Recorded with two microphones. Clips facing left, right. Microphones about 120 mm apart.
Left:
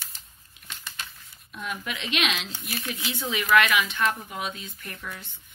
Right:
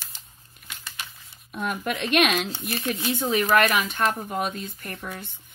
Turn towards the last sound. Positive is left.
turn(degrees=-55)  # may be behind; listen again after turning